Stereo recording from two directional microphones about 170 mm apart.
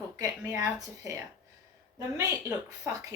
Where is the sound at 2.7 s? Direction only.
20° right (ahead or behind).